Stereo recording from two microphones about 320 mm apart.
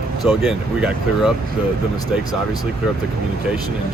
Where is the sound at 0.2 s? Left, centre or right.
Centre.